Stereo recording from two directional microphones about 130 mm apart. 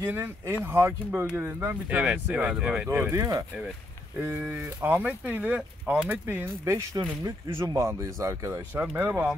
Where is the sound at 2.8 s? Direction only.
25° right (ahead or behind).